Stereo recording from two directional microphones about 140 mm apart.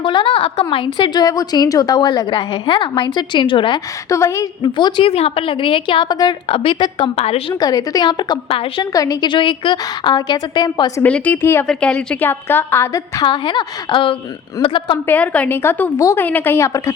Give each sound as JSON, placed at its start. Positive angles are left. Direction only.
{"t": 0.0, "sound": "a woman's voice", "side_deg": 35}
{"t": 4.1, "sound": "a woman's voice", "side_deg": 20}
{"t": 4.6, "sound": "a woman's voice", "side_deg": 30}
{"t": 7.2, "sound": "a woman's voice", "side_deg": 45}
{"t": 7.6, "sound": "a woman's voice", "side_deg": 25}
{"t": 8.9, "sound": "a woman's voice", "side_deg": 25}
{"t": 11.0, "sound": "a woman's voice", "side_deg": 10}
{"t": 13.2, "sound": "a woman's voice", "side_deg": 35}
{"t": 15.0, "sound": "a woman's voice", "side_deg": 10}